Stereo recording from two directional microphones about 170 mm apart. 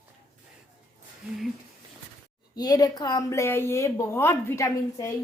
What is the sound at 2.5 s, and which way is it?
A woman's voice, 25° left (ahead or behind).